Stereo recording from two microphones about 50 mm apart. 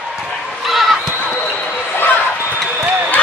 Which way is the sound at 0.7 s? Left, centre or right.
Centre.